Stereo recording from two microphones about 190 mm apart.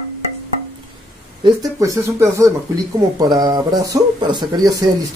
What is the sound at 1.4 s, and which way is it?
Speech, 15° right (ahead or behind).